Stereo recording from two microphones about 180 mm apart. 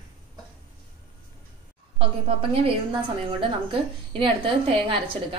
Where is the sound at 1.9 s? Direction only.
30° right (ahead or behind).